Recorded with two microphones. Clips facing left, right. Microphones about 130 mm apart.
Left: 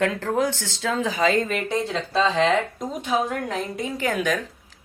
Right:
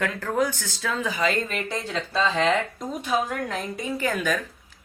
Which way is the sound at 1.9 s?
30° left (ahead or behind).